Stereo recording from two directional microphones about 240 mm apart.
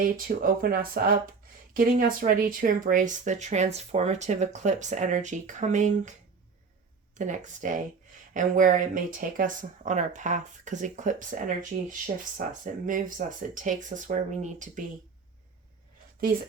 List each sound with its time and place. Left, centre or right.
0.0 s speech: right
7.2 s speech: right